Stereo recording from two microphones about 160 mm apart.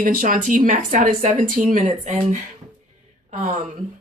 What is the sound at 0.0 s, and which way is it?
Speech, 60° right (ahead or behind).